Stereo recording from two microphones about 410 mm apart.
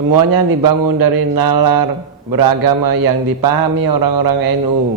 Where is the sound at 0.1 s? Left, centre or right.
Right.